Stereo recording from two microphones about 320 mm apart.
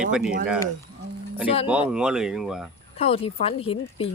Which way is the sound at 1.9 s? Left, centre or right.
Centre.